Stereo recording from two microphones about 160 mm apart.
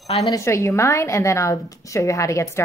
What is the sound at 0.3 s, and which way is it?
A woman's voice, 20° left (ahead or behind).